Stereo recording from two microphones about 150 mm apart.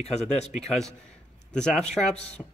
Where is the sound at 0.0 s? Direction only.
45° left (ahead or behind).